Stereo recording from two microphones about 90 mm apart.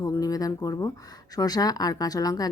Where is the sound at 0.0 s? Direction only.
40° left (ahead or behind).